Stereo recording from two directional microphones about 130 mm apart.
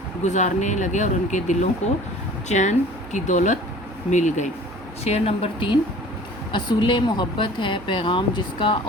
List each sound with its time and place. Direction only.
0.3 s speech: 65° left (ahead or behind)
5.0 s a woman's voice: 50° left (ahead or behind)